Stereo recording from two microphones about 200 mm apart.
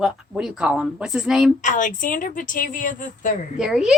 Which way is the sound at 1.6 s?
40° left (ahead or behind).